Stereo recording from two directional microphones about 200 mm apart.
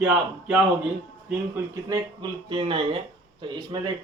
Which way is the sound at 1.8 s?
20° right (ahead or behind).